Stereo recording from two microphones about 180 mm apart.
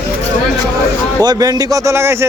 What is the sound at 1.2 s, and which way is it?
Speech, 20° right (ahead or behind).